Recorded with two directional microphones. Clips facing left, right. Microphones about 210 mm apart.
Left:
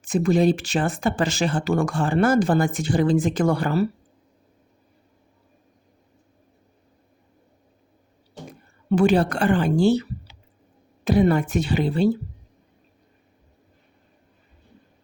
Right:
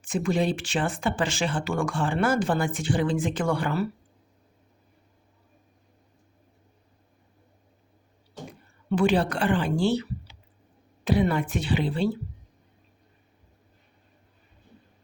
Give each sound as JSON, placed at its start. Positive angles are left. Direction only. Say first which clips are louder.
{"t": 0.0, "sound": "speech", "louder": "left 6 dB", "side_deg": 40}
{"t": 8.9, "sound": "a woman's voice", "louder": "left 4 dB", "side_deg": 40}